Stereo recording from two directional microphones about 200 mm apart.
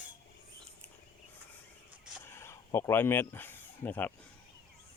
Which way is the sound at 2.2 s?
10° left (ahead or behind).